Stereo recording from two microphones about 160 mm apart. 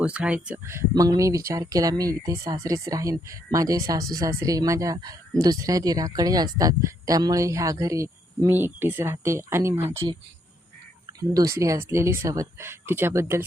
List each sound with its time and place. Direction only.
0.0 s speech: 5° right (ahead or behind)
11.2 s speech: 20° right (ahead or behind)